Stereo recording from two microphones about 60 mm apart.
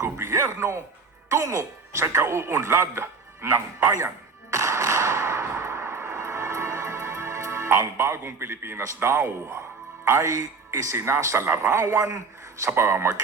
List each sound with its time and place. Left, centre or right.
0.0 s a man's voice: right
4.5 s a sound: right
9.0 s speech: right
10.2 s speech: right
10.9 s speech: right